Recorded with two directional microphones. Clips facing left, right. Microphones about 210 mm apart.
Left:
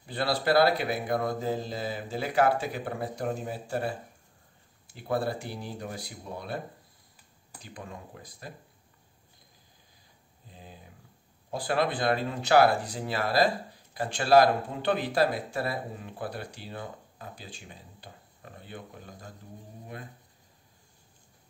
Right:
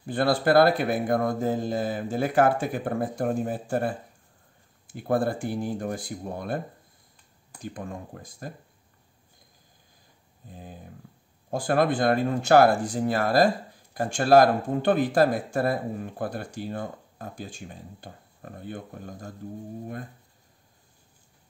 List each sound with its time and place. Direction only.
0.0 s speech: 50° right (ahead or behind)
7.6 s speech: 50° right (ahead or behind)
11.5 s speech: 50° right (ahead or behind)